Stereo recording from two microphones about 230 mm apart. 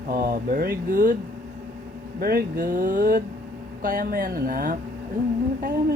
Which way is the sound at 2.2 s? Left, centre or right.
Right.